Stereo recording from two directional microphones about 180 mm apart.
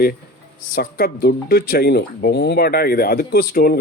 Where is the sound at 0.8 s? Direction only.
55° left (ahead or behind).